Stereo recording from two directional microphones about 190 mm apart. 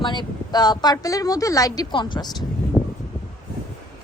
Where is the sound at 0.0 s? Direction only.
25° left (ahead or behind).